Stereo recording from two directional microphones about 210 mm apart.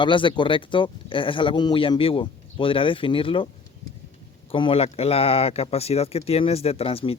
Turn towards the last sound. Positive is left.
turn(degrees=25)  # may be behind; listen again after turning